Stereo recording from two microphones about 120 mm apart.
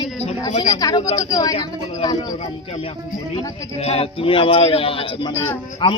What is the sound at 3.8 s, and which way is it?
A man's voice, 60° left (ahead or behind).